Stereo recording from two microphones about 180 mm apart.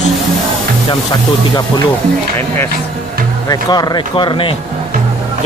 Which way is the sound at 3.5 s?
20° left (ahead or behind).